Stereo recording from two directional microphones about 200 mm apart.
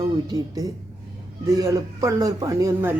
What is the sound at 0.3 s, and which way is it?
Speech, 20° right (ahead or behind).